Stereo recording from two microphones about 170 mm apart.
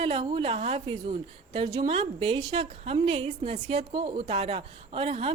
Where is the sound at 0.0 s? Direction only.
30° right (ahead or behind).